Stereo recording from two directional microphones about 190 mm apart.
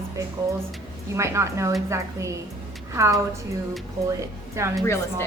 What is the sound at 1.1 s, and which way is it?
Speech, 15° right (ahead or behind).